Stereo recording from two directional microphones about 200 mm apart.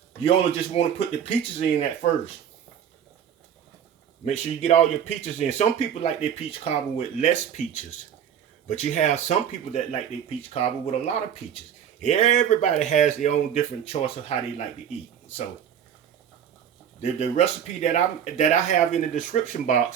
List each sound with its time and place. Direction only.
0.8 s speech: 30° left (ahead or behind)
4.3 s speech: 35° left (ahead or behind)
17.0 s speech: 30° left (ahead or behind)